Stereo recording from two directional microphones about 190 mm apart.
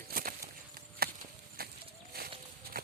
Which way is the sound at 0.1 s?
50° right (ahead or behind).